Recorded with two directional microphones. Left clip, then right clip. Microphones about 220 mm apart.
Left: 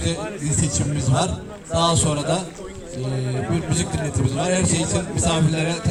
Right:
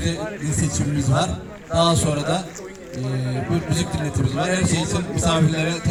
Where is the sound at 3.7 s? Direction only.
50° right (ahead or behind).